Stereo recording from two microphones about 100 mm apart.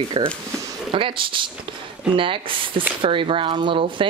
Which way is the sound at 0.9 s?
60° right (ahead or behind).